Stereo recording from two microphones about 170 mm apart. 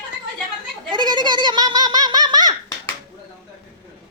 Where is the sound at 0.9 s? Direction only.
25° right (ahead or behind).